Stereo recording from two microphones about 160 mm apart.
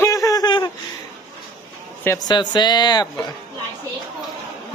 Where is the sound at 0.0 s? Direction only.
20° left (ahead or behind).